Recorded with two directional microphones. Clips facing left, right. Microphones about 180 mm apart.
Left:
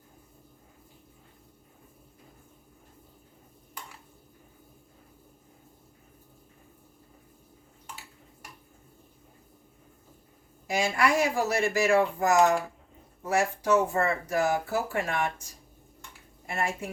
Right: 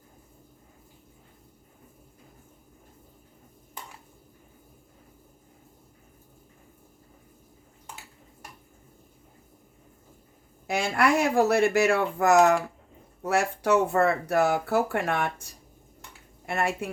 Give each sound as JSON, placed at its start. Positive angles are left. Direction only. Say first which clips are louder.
{"t": 10.7, "sound": "speech", "louder": "right 2 dB", "side_deg": -60}